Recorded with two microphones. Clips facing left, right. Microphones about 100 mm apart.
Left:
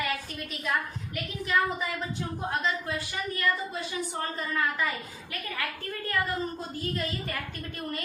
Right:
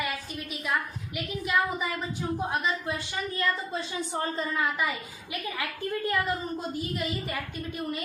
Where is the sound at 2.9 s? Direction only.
25° right (ahead or behind).